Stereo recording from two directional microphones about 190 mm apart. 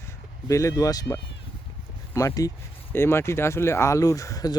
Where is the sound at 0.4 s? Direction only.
15° left (ahead or behind).